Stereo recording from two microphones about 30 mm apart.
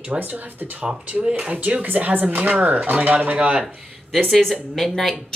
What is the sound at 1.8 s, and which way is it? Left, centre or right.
Speech, right.